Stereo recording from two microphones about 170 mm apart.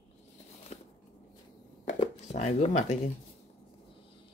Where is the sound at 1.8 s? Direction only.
40° left (ahead or behind).